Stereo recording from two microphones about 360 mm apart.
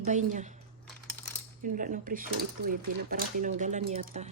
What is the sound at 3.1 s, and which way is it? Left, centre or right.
A woman's voice, right.